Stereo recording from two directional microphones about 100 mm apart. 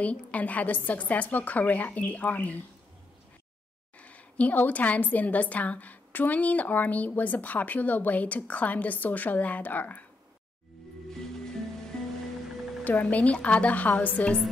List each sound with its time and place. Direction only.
0.0 s a woman's voice: 15° left (ahead or behind)
4.0 s a woman's voice: 15° left (ahead or behind)
11.9 s music: 5° left (ahead or behind)
12.8 s a woman's voice: 15° left (ahead or behind)